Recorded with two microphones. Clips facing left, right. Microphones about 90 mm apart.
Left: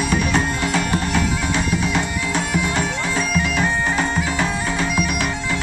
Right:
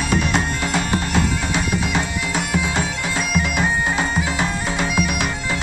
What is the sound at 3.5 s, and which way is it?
Bagpipes, 15° right (ahead or behind).